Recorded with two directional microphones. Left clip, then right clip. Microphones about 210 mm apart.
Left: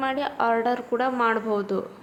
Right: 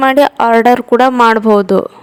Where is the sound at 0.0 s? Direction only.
50° right (ahead or behind).